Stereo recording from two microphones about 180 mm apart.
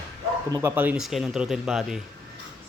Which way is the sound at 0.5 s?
15° right (ahead or behind).